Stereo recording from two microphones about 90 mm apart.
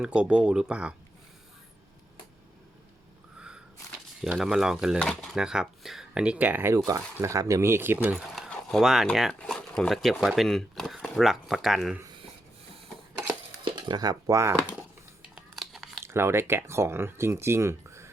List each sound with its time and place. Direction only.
0.0 s speech: 10° right (ahead or behind)
4.4 s speech: 5° right (ahead or behind)
4.9 s speech: 10° left (ahead or behind)
5.3 s speech: 5° right (ahead or behind)
8.1 s speech: centre (ahead or behind)
8.4 s a sound: centre (ahead or behind)
9.4 s speech: 10° left (ahead or behind)
13.7 s speech: 55° right (ahead or behind); by 14.5 s 35° right (ahead or behind)
15.5 s a sound: centre (ahead or behind)
16.0 s speech: 30° right (ahead or behind)